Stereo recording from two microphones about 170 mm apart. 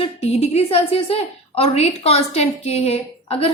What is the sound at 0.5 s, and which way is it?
A woman's voice, 35° left (ahead or behind).